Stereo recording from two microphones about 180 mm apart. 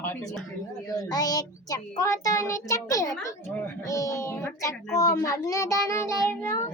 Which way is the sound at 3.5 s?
15° left (ahead or behind).